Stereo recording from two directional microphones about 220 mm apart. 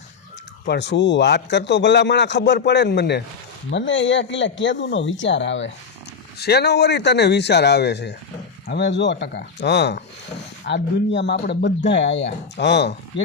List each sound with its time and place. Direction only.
0.7 s a man's voice: 55° left (ahead or behind)